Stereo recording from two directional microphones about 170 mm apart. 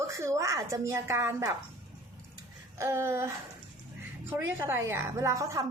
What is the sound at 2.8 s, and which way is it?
A woman's voice, 15° right (ahead or behind).